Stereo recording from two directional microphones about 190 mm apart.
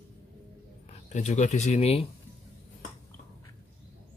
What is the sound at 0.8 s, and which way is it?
Speech, 35° left (ahead or behind).